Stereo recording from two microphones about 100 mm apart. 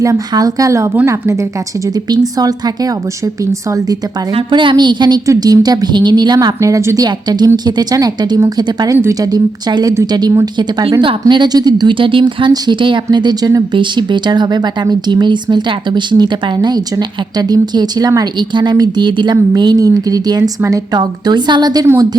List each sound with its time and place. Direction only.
0.0 s a woman's voice: 35° right (ahead or behind)
2.0 s a woman's voice: 40° right (ahead or behind)
4.4 s a woman's voice: 55° right (ahead or behind)